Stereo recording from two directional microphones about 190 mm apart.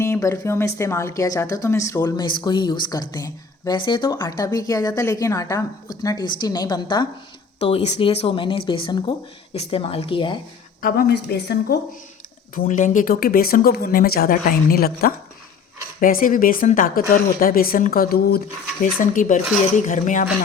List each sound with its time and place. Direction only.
0.0 s speech: 15° left (ahead or behind)
7.6 s speech: 35° left (ahead or behind)
10.8 s a woman's voice: 50° left (ahead or behind)
12.5 s speech: 40° left (ahead or behind)